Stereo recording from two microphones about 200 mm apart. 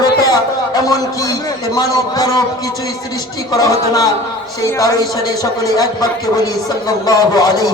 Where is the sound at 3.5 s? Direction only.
20° left (ahead or behind).